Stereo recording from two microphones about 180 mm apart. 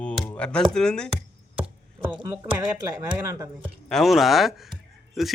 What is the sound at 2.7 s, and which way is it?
Speech, 20° right (ahead or behind).